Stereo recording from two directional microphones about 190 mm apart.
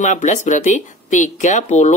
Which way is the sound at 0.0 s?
40° left (ahead or behind).